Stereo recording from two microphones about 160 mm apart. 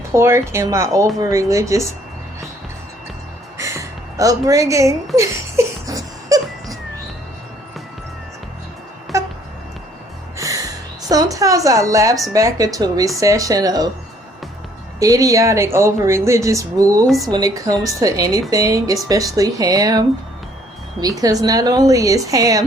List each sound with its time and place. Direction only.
0.1 s speech: 15° right (ahead or behind)
3.6 s a sound: 20° right (ahead or behind)
9.1 s music: 20° right (ahead or behind)
10.3 s music: 20° right (ahead or behind)
11.1 s speech: 20° right (ahead or behind)
14.9 s speech: 20° right (ahead or behind)